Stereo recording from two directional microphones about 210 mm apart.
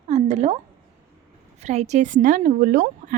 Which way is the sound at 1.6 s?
35° right (ahead or behind).